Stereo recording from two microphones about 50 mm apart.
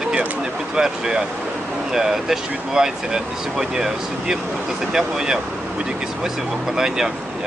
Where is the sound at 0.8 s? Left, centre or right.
Centre.